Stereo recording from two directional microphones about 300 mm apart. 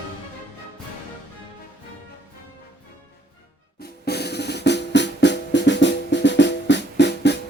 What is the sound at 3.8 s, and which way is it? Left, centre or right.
Drum, left.